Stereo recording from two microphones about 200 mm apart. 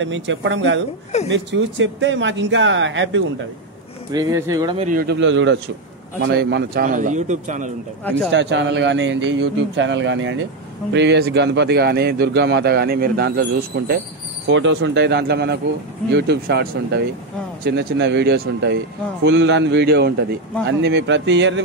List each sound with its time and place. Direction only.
0.0 s speech: 70° right (ahead or behind)
4.1 s speech: 15° right (ahead or behind)
4.7 s a man's voice: 40° right (ahead or behind)
5.0 s a man's voice: 65° right (ahead or behind); by 7.7 s 40° right (ahead or behind)
8.0 s speech: 5° left (ahead or behind)
8.3 s a man's voice: 65° right (ahead or behind)
14.5 s a man's voice: 70° right (ahead or behind)